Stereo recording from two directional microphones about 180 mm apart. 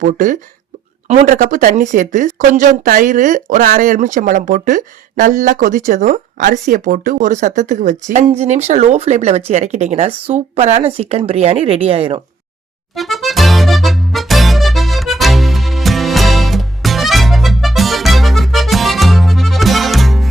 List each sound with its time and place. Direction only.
0.0 s speech: 45° right (ahead or behind)
13.0 s music: centre (ahead or behind)